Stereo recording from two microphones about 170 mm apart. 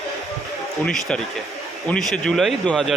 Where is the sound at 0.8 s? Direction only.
5° left (ahead or behind).